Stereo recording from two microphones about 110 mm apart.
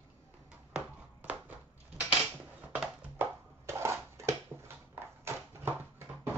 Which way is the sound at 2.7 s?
15° right (ahead or behind).